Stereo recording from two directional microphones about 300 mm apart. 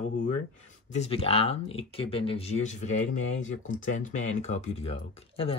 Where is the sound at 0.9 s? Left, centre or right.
Left.